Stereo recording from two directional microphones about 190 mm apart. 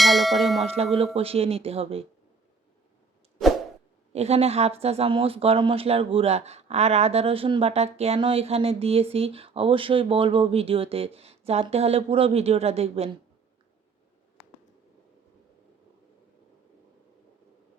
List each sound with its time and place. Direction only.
0.0 s church bell: centre (ahead or behind)
0.6 s speech: 35° right (ahead or behind)
4.1 s speech: 35° right (ahead or behind)